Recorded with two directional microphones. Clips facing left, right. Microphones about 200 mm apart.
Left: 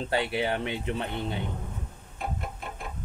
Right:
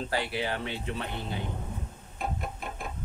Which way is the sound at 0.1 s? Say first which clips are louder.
Left 5 dB; 25° left (ahead or behind).